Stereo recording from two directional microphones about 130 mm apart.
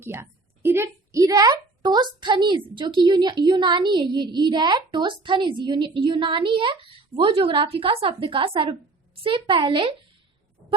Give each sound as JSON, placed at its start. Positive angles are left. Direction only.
{"t": 0.0, "sound": "a woman's voice", "side_deg": -20}